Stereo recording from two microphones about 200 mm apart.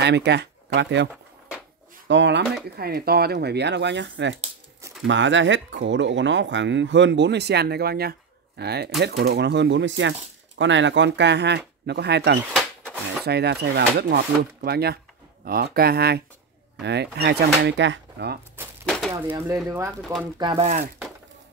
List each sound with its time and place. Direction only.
0.0 s speech: 60° right (ahead or behind)
2.0 s speech: 60° right (ahead or behind)
2.7 s speech: 50° right (ahead or behind)
12.5 s a sound: 5° left (ahead or behind)
13.2 s speech: 55° right (ahead or behind)
18.9 s a sound: centre (ahead or behind)
19.1 s speech: 15° right (ahead or behind)
20.0 s speech: centre (ahead or behind)
20.3 s speech: 20° right (ahead or behind)